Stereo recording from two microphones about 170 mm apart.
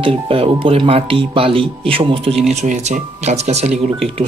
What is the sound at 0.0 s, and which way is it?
Speech, 35° right (ahead or behind).